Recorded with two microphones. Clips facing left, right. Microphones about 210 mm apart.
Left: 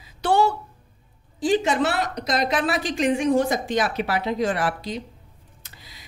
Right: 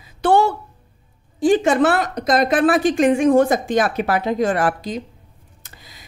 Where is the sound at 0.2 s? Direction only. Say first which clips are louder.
Right 4 dB; 55° right (ahead or behind).